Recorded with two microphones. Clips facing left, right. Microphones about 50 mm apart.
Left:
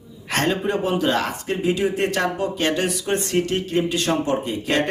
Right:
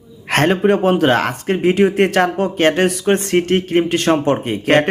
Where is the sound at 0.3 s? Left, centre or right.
Right.